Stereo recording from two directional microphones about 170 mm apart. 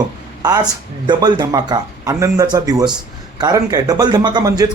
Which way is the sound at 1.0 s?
25° right (ahead or behind).